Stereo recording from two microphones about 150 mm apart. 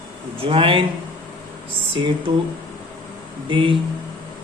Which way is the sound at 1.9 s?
35° right (ahead or behind).